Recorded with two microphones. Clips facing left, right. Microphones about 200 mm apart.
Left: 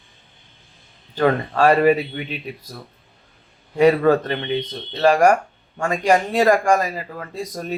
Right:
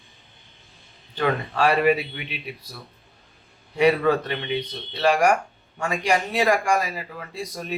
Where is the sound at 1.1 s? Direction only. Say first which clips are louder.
Left 5 dB; 45° left (ahead or behind).